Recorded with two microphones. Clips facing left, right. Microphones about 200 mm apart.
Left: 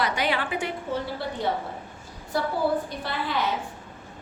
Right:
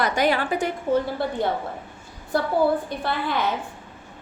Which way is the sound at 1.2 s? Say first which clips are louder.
Right 4 dB; 50° right (ahead or behind).